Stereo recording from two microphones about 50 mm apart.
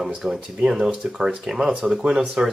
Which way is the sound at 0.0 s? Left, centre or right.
Centre.